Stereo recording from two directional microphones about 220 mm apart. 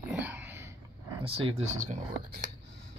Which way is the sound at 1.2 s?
25° right (ahead or behind).